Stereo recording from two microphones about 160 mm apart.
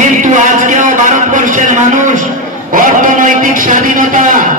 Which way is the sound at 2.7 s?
55° right (ahead or behind).